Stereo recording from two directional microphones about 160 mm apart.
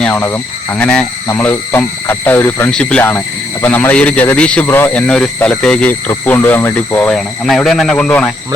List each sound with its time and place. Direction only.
0.0 s speech: 15° left (ahead or behind)